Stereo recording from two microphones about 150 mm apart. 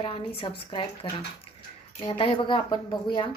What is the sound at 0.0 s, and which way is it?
Speech, 35° left (ahead or behind).